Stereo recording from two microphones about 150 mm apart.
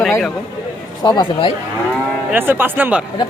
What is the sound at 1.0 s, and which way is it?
Speech, 30° left (ahead or behind).